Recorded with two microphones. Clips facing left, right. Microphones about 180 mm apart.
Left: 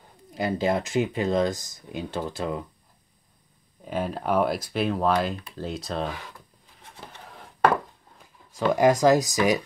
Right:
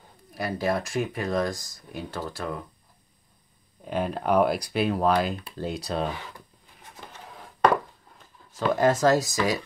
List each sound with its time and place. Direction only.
0.3 s speech: 20° left (ahead or behind)
3.8 s speech: 5° left (ahead or behind)
8.2 s speech: 15° left (ahead or behind)